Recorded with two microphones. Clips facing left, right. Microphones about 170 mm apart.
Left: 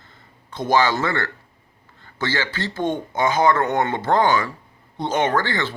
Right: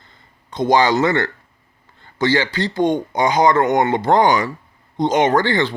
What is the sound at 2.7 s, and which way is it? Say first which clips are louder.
Speech: right 6 dB; 15° right (ahead or behind).